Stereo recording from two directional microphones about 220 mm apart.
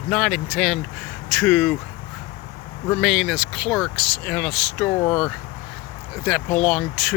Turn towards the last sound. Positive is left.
turn(degrees=0)  # may be behind; listen again after turning